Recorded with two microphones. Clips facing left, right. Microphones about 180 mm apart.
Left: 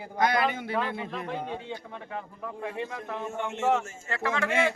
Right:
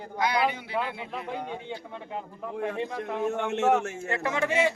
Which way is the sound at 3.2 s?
65° right (ahead or behind).